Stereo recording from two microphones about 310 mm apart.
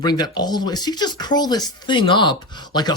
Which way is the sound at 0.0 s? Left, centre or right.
Centre.